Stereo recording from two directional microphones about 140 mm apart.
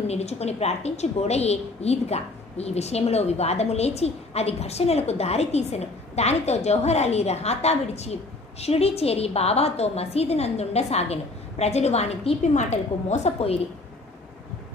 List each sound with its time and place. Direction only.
0.1 s a woman's voice: 50° left (ahead or behind)